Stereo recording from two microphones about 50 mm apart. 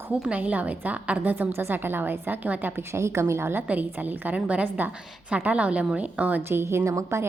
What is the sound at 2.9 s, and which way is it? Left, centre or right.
Speech, right.